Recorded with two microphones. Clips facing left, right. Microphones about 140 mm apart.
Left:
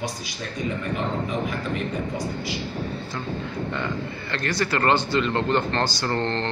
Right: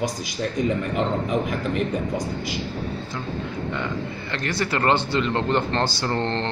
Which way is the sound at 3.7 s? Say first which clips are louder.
Right 1 dB; 15° right (ahead or behind).